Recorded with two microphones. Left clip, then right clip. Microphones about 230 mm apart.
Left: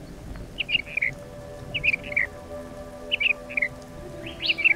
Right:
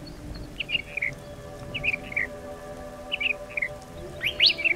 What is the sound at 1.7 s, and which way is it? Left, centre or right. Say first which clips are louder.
Music: left 4 dB; centre.